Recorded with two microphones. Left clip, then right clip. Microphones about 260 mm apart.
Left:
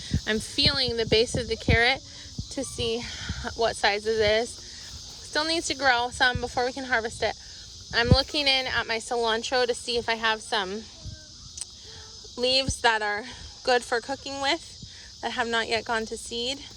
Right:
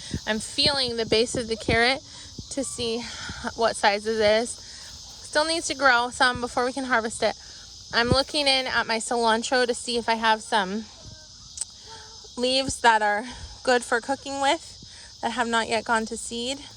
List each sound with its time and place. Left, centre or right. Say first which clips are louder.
0.3 s speech: right 1 dB; centre
1.0 s a woman's voice: even; right
8.3 s speech: right 1 dB; right
8.5 s a woman's voice: right 2 dB; right
12.4 s a woman's voice: right 1 dB; right